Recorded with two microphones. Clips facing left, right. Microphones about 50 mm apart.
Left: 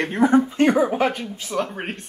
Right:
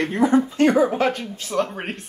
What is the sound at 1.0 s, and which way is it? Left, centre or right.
Speech, centre.